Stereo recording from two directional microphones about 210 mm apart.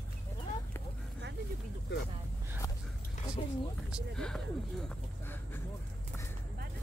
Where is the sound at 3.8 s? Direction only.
Centre (ahead or behind).